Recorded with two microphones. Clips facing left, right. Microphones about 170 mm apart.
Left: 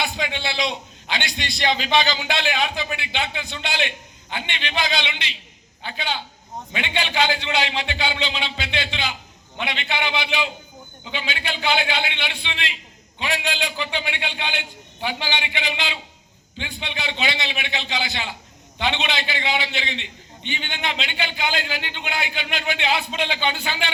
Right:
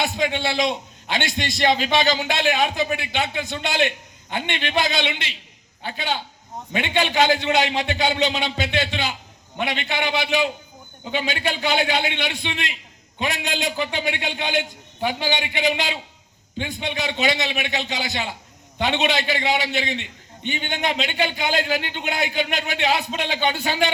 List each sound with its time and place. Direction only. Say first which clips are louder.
0.0 s a man's voice: right 4 dB; 50° right (ahead or behind)